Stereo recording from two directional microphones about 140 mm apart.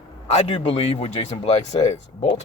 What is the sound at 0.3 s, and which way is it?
Speech, 50° left (ahead or behind).